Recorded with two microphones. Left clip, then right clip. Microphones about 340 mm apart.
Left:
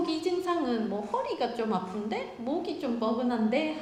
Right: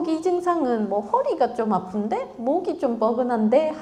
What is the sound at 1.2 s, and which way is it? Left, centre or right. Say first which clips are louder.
A woman's voice: right 9 dB; right.